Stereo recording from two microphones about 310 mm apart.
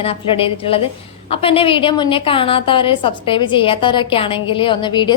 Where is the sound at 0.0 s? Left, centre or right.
Centre.